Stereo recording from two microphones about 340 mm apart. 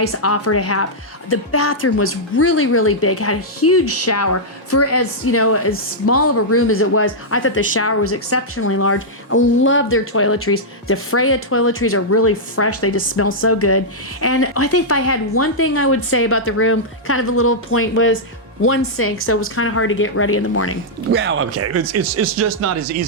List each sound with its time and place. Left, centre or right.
0.0 s a woman's voice: left
21.1 s speech: right